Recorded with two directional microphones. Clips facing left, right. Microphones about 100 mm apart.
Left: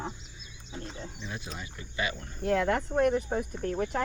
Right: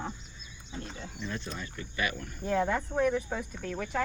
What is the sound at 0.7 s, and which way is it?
Speech, 30° left (ahead or behind).